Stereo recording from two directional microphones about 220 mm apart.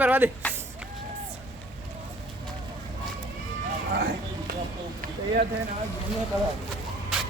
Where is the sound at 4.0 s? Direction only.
50° right (ahead or behind).